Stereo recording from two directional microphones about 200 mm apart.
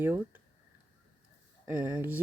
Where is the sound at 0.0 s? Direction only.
10° right (ahead or behind).